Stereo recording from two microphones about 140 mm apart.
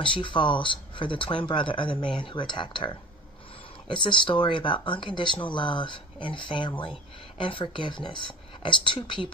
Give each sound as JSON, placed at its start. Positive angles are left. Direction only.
{"t": 0.0, "sound": "speech", "side_deg": 35}